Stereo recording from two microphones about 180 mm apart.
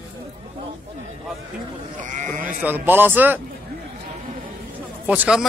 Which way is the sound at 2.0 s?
45° right (ahead or behind).